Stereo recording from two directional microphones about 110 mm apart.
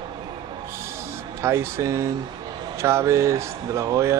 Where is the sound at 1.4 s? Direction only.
25° right (ahead or behind).